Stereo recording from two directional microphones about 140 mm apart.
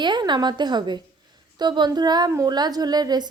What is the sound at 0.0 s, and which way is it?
A woman's voice, 35° right (ahead or behind).